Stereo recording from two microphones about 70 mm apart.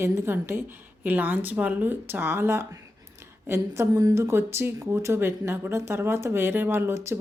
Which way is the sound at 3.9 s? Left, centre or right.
Right.